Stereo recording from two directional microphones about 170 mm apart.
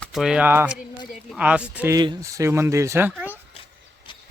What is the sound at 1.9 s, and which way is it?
Speech, 20° right (ahead or behind).